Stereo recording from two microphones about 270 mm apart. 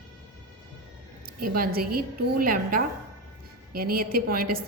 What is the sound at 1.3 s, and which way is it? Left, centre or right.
A woman's voice, right.